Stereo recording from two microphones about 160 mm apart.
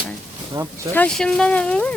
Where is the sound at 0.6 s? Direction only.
25° right (ahead or behind).